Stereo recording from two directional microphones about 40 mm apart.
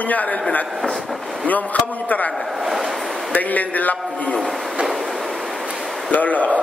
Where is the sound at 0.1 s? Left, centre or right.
Left.